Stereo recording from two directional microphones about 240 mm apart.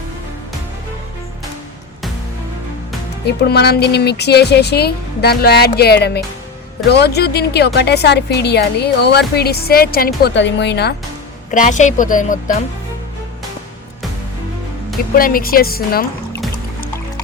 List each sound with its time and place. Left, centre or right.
3.2 s speech: left
11.5 s speech: left
15.2 s speech: left